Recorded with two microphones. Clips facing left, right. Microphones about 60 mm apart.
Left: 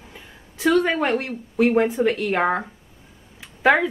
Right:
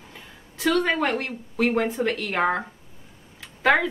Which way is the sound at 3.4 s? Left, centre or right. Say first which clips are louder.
Left 3 dB; centre.